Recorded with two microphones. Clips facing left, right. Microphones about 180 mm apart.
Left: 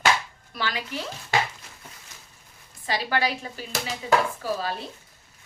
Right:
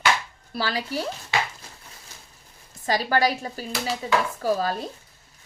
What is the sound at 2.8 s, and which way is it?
Speech, 40° right (ahead or behind).